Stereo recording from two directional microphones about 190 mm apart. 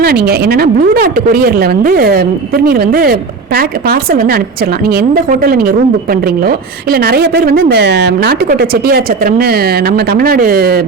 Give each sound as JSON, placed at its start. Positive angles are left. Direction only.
{"t": 0.0, "sound": "speech", "side_deg": -55}